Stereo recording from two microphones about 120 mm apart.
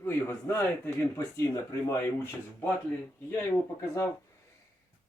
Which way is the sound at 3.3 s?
20° left (ahead or behind).